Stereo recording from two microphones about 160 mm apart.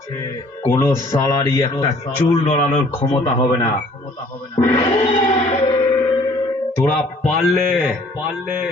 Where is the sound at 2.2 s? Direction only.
40° left (ahead or behind).